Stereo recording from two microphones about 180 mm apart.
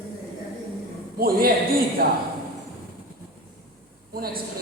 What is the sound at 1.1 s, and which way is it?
Speech, 55° right (ahead or behind).